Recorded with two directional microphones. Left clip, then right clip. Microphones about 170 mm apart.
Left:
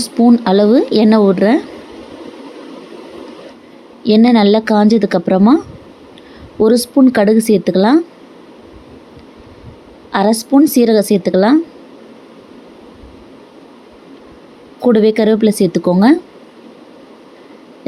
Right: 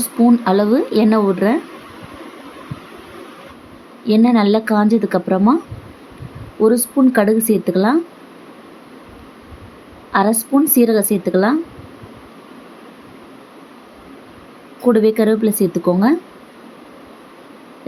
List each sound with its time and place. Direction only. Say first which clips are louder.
0.0 s speech: left 3 dB; 25° left (ahead or behind)
4.0 s speech: left 4 dB; 30° left (ahead or behind)
10.1 s speech: left 3 dB; 30° left (ahead or behind)
14.8 s speech: left 3 dB; 30° left (ahead or behind)